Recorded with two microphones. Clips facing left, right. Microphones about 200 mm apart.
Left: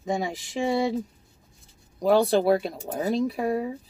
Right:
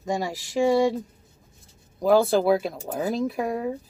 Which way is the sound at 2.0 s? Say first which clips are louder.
Right 1 dB; centre (ahead or behind).